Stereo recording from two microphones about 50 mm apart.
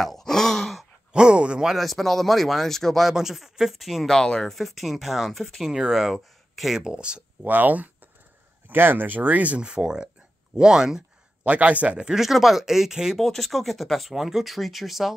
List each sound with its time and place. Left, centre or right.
0.0 s groan: centre
1.1 s a sound: centre
1.7 s speech: centre
3.1 s speech: centre
4.2 s speech: centre
5.7 s speech: centre
6.8 s speech: centre
7.4 s speech: right
9.6 s speech: centre
11.4 s a man's voice: right
12.0 s speech: centre
13.2 s speech: centre